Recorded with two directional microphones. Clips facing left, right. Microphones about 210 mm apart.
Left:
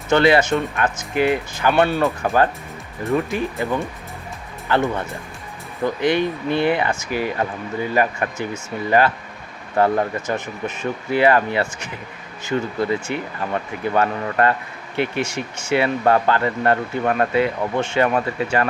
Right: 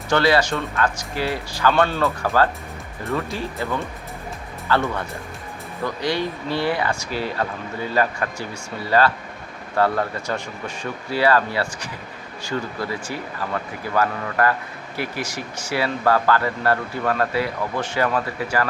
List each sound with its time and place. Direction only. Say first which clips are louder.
0.1 s speech: left 3 dB; 20° left (ahead or behind)